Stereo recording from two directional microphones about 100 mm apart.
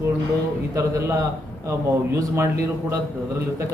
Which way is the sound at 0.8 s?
30° right (ahead or behind).